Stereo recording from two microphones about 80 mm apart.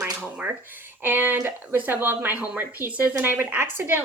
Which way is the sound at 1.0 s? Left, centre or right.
Right.